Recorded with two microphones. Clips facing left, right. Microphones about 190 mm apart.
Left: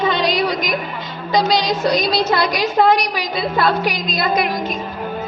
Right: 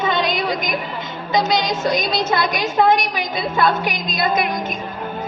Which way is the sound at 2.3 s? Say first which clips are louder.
Left 2 dB; 50° right (ahead or behind).